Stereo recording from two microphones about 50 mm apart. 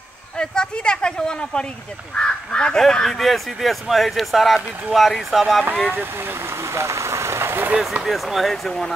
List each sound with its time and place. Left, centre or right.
0.4 s speech: centre
5.9 s speech: right
8.0 s speech: centre